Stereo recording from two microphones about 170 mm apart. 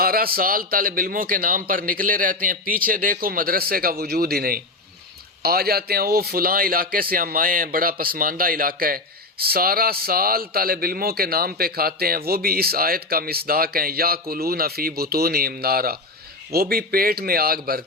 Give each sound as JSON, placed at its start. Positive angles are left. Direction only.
{"t": 0.0, "sound": "speech", "side_deg": -60}